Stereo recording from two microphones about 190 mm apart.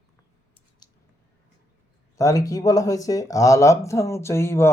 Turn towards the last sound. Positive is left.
turn(degrees=15)  # may be behind; listen again after turning